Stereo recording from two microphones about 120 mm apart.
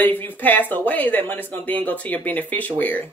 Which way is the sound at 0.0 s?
15° left (ahead or behind).